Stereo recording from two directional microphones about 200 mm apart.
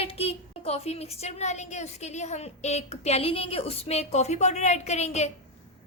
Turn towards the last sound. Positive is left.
turn(degrees=35)  # may be behind; listen again after turning